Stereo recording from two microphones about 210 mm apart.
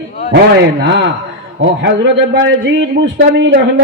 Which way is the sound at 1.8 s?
60° right (ahead or behind).